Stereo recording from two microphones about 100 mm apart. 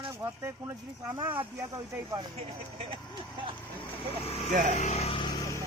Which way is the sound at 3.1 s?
50° right (ahead or behind).